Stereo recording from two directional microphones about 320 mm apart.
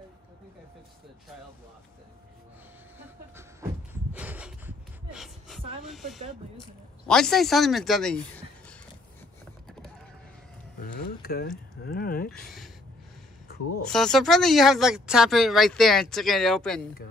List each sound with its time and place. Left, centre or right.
3.9 s a sound: centre
5.9 s speech: centre
10.8 s speech: left
12.3 s speech: centre
13.8 s speech: centre